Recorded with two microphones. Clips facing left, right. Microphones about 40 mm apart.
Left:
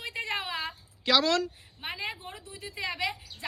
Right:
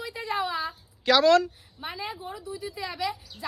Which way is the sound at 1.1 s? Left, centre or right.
Right.